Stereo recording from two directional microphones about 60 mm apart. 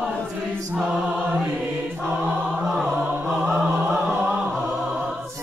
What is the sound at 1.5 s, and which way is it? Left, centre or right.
Choir, right.